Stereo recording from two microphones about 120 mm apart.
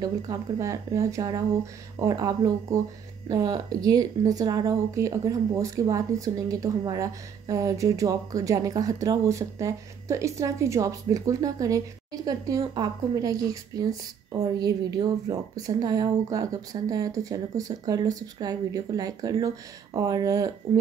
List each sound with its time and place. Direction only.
0.0 s speech: 30° right (ahead or behind)